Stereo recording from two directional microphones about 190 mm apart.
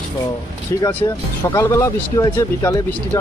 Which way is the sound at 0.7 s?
15° left (ahead or behind).